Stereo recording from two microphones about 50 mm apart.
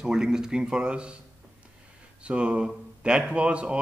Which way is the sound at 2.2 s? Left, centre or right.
Right.